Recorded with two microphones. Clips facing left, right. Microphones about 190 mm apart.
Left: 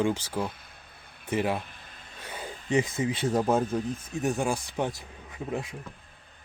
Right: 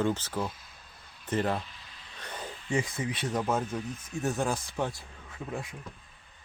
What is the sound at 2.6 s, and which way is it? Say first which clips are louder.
Speech: left 5 dB; 20° left (ahead or behind).